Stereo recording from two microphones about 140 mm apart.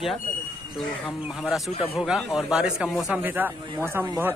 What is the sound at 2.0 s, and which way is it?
Speech, 5° right (ahead or behind).